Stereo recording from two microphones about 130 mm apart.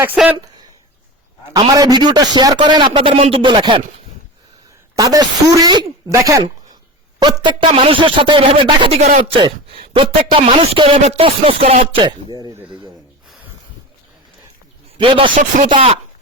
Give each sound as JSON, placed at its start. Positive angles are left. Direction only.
{"t": 1.7, "sound": "a man's voice", "side_deg": -30}
{"t": 4.9, "sound": "speech", "side_deg": -25}
{"t": 7.4, "sound": "a man's voice", "side_deg": -50}
{"t": 9.0, "sound": "speech", "side_deg": -60}
{"t": 9.7, "sound": "speech", "side_deg": -45}
{"t": 10.5, "sound": "a sound", "side_deg": -40}
{"t": 11.9, "sound": "a man's voice", "side_deg": -35}
{"t": 14.9, "sound": "speech", "side_deg": -40}
{"t": 15.4, "sound": "speech", "side_deg": -70}
{"t": 15.7, "sound": "a sound", "side_deg": -50}